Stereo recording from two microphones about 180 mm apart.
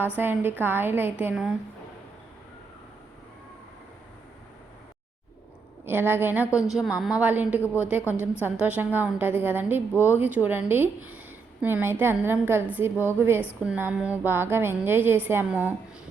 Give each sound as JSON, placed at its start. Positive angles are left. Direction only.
{"t": 0.2, "sound": "a woman's voice", "side_deg": -10}
{"t": 5.8, "sound": "a woman's voice", "side_deg": -10}